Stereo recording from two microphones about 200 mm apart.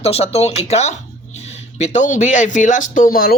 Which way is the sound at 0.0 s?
30° left (ahead or behind).